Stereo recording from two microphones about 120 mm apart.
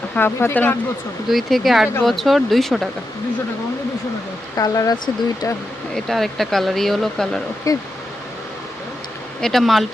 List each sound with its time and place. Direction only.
0.2 s speech: 20° left (ahead or behind)
1.3 s speech: centre (ahead or behind)
4.5 s speech: 30° left (ahead or behind)
6.1 s speech: centre (ahead or behind)
7.7 s speech: 30° left (ahead or behind)
9.4 s speech: centre (ahead or behind)